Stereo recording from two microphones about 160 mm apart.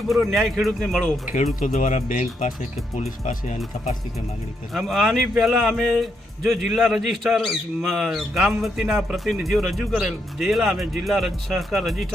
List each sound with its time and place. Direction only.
0.1 s speech: centre (ahead or behind)
1.5 s speech: 55° left (ahead or behind)
4.7 s speech: centre (ahead or behind)